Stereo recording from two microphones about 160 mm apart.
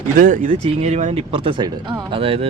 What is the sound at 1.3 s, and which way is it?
Speech, 35° right (ahead or behind).